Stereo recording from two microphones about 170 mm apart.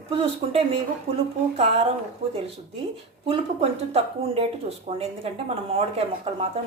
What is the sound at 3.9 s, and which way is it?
Speech, 35° right (ahead or behind).